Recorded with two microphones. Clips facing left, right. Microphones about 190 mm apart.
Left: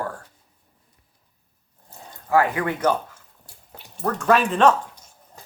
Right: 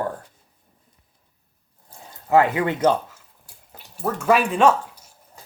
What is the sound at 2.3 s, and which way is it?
Speech, 20° right (ahead or behind).